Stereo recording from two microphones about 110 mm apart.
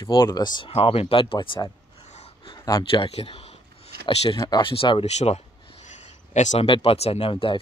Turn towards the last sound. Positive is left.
turn(degrees=55)  # may be behind; listen again after turning